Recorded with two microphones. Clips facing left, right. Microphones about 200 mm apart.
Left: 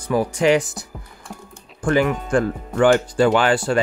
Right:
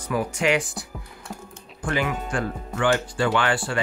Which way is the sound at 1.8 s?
45° left (ahead or behind).